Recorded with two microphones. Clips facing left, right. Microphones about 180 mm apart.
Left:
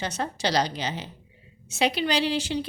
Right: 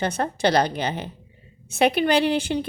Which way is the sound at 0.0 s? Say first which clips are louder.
Right 6 dB; 55° right (ahead or behind).